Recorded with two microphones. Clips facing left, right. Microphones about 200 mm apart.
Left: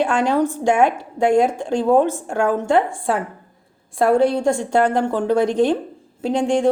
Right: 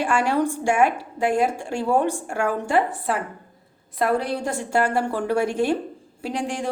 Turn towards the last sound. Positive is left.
turn(degrees=25)  # may be behind; listen again after turning